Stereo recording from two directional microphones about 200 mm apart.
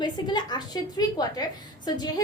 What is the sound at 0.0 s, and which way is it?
A woman's voice, 20° left (ahead or behind).